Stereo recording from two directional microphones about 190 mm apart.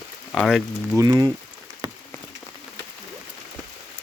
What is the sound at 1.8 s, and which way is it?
Rain on surface, 20° right (ahead or behind).